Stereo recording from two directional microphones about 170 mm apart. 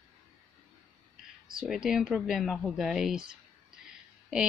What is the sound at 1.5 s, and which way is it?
Speech, 5° right (ahead or behind).